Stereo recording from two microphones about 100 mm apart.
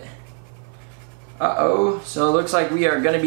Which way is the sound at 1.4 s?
20° right (ahead or behind).